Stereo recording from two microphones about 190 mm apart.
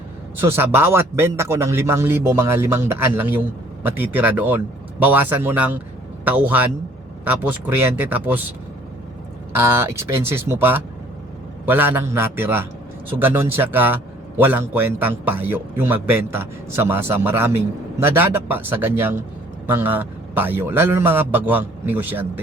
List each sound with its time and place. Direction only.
0.3 s a man's voice: 10° right (ahead or behind)
9.5 s a man's voice: 10° right (ahead or behind)